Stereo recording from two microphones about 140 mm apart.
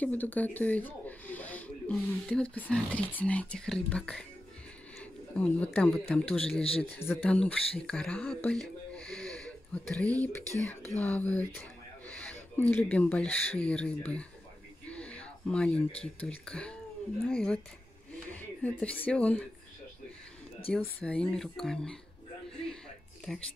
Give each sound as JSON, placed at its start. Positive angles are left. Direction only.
{"t": 0.0, "sound": "speech", "side_deg": 10}
{"t": 5.3, "sound": "speech", "side_deg": 5}
{"t": 14.9, "sound": "a sound", "side_deg": 10}
{"t": 16.2, "sound": "speech", "side_deg": 10}
{"t": 20.7, "sound": "speech", "side_deg": 10}
{"t": 23.3, "sound": "speech", "side_deg": 0}